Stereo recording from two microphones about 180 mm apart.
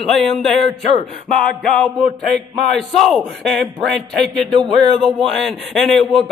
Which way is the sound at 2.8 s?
Centre (ahead or behind).